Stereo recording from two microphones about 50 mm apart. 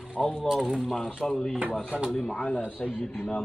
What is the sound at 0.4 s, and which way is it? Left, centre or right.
Speech, centre.